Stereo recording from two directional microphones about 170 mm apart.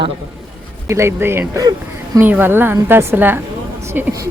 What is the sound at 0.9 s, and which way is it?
A woman's voice, 15° right (ahead or behind).